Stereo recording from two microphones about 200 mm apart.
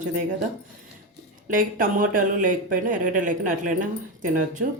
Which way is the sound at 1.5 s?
45° right (ahead or behind).